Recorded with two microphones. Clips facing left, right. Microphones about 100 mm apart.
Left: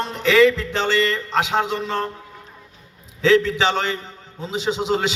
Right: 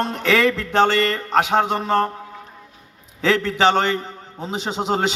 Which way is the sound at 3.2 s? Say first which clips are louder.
Left 1 dB; 45° right (ahead or behind).